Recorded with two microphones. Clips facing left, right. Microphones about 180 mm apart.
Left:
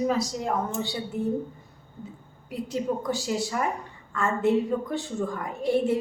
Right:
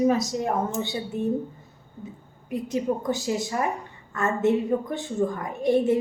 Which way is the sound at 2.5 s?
20° right (ahead or behind).